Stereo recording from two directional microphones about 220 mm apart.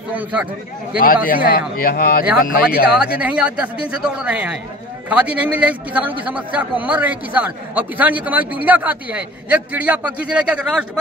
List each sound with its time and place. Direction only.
0.1 s a man's voice: 5° right (ahead or behind)
0.9 s speech: 40° left (ahead or behind)
3.2 s a man's voice: 5° right (ahead or behind)